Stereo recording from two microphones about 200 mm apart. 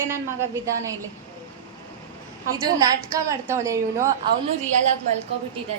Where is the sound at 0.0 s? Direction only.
15° right (ahead or behind).